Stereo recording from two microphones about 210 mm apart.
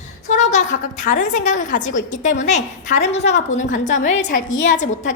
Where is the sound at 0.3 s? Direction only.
35° left (ahead or behind).